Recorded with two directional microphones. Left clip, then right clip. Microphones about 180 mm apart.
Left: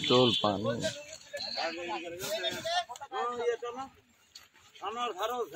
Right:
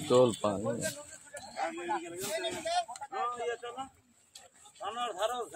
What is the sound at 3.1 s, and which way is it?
Speech, 35° left (ahead or behind).